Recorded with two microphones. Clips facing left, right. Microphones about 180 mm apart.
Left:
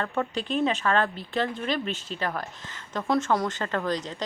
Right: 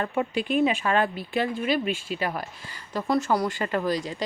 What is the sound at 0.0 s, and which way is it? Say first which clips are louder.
Speech: right 2 dB; 10° right (ahead or behind).